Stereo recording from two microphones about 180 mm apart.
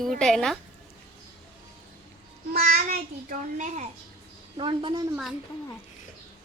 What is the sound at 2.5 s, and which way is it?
A child's voice, 50° right (ahead or behind).